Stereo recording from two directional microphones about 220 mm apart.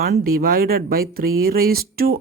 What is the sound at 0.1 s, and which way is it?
Speech, 40° right (ahead or behind).